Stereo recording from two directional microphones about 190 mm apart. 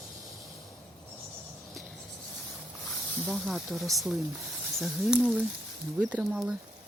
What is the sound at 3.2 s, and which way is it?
Speech, centre (ahead or behind).